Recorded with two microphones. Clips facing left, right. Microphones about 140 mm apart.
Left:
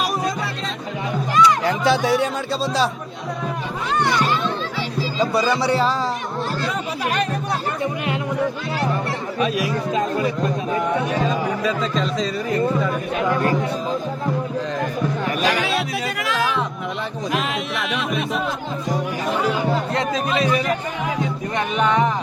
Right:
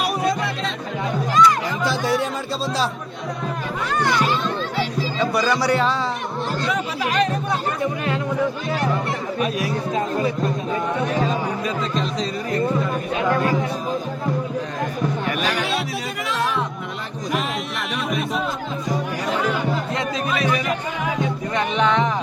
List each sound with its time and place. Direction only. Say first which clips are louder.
1.6 s speech: left 5 dB; 65° left (ahead or behind)
2.0 s speech: left 2 dB; centre (ahead or behind)
5.2 s speech: left 1 dB; 25° left (ahead or behind)
9.4 s speech: left 3 dB; 85° left
16.3 s music: left 1 dB; centre (ahead or behind)
17.9 s music: right 1 dB; centre (ahead or behind)
19.9 s music: left 2 dB; 30° left (ahead or behind)
21.8 s music: left 1 dB; 10° left (ahead or behind)